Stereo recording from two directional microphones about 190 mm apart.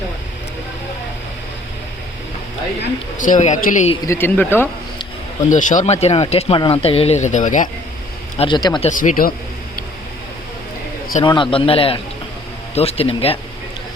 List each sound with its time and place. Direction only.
3.2 s speech: 40° left (ahead or behind)
4.0 s speech: 10° left (ahead or behind)
5.5 s speech: 40° left (ahead or behind)
8.4 s a man's voice: 25° left (ahead or behind)
8.9 s speech: 45° left (ahead or behind)
11.2 s a man's voice: 25° left (ahead or behind)